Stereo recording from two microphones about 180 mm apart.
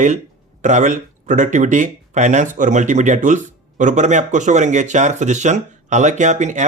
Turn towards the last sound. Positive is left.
turn(degrees=-40)  # may be behind; listen again after turning